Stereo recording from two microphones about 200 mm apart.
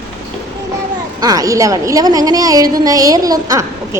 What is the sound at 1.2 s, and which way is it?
A woman's voice, 20° right (ahead or behind).